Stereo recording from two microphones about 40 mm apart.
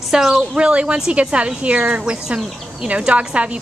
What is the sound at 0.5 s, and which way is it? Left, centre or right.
A woman's voice, right.